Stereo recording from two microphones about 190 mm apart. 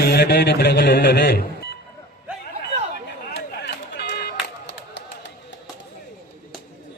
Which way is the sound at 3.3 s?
60° left (ahead or behind).